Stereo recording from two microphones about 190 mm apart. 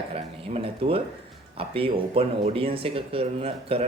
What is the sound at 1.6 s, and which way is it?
Speech, 30° right (ahead or behind).